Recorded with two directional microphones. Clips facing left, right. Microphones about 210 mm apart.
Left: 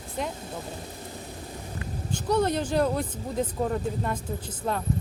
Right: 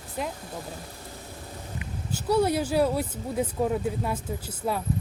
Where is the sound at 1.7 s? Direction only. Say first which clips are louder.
Left 1 dB; 10° right (ahead or behind).